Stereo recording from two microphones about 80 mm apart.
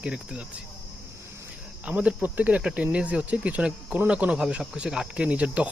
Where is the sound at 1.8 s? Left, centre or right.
Centre.